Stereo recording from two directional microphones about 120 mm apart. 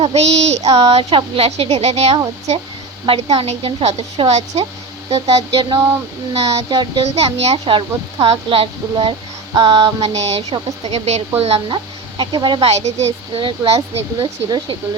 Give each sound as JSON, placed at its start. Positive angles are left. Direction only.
{"t": 0.1, "sound": "speech", "side_deg": -65}
{"t": 5.1, "sound": "speech", "side_deg": -35}
{"t": 7.0, "sound": "a woman's voice", "side_deg": -60}
{"t": 10.0, "sound": "a woman's voice", "side_deg": -60}
{"t": 12.1, "sound": "speech", "side_deg": -40}
{"t": 12.6, "sound": "speech", "side_deg": -65}
{"t": 13.3, "sound": "a woman's voice", "side_deg": -55}
{"t": 14.2, "sound": "a woman's voice", "side_deg": -40}